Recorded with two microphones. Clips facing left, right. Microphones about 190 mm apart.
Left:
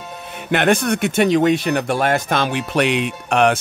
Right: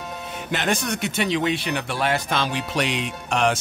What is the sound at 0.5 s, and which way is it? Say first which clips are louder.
Speech: left 8 dB; 60° left (ahead or behind).